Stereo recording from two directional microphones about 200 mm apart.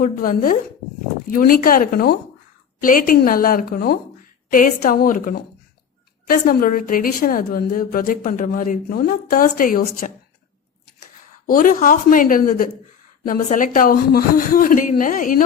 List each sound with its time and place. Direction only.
0.0 s a woman's voice: 45° left (ahead or behind)
11.4 s a woman's voice: 40° left (ahead or behind)